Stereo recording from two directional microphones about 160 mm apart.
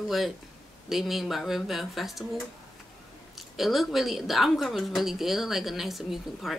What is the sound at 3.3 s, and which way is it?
Speech, centre (ahead or behind).